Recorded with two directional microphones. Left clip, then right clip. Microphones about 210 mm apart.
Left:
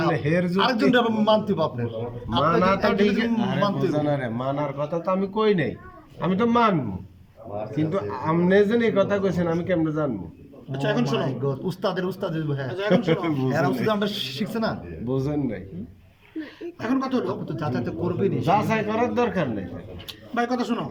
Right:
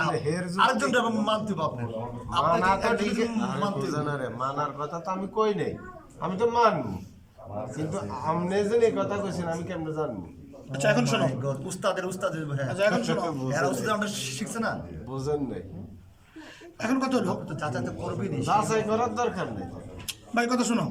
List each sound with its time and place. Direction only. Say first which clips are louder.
0.3 s a man's voice: left 2 dB; 40° left (ahead or behind)
2.4 s a man's voice: left 3 dB; 40° left (ahead or behind)
7.9 s a man's voice: left 3 dB; 40° left (ahead or behind)
10.7 s a man's voice: even; centre (ahead or behind)
11.4 s speech: left 2 dB; 25° left (ahead or behind)
12.6 s a man's voice: left 2 dB; centre (ahead or behind)
13.4 s speech: left 4 dB; 30° left (ahead or behind)
16.8 s a man's voice: left 1 dB; centre (ahead or behind)
17.6 s a man's voice: left 4 dB; 25° left (ahead or behind)
20.1 s speech: left 1 dB; centre (ahead or behind)